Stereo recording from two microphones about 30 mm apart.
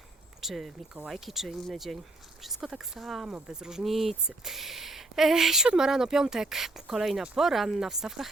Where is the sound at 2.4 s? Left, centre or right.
Centre.